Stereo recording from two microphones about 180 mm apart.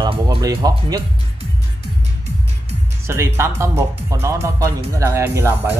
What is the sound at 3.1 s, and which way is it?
Speech, 15° right (ahead or behind).